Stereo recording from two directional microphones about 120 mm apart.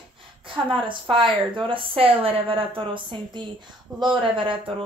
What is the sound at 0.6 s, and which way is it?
Speech, 45° right (ahead or behind).